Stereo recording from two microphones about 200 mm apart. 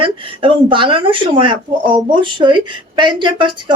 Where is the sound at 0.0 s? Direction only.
25° right (ahead or behind).